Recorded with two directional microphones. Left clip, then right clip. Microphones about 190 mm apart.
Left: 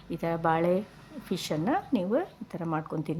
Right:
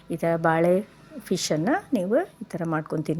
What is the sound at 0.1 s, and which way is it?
A woman's voice, 15° right (ahead or behind).